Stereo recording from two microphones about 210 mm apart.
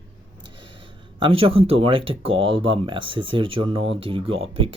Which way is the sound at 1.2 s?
25° right (ahead or behind).